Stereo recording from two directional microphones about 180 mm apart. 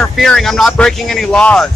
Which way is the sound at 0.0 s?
Centre (ahead or behind).